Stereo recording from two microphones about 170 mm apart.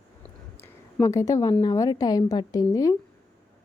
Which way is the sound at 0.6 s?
15° left (ahead or behind).